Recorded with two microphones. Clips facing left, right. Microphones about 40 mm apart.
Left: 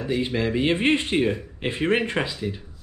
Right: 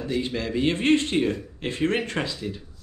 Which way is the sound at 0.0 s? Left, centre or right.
Centre.